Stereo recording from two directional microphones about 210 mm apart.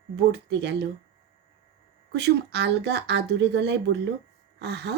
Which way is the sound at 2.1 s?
55° right (ahead or behind).